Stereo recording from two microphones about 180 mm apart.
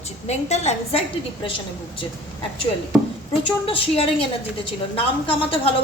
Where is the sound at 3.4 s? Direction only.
30° left (ahead or behind).